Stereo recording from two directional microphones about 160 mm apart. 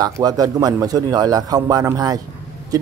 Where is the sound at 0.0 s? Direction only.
25° right (ahead or behind).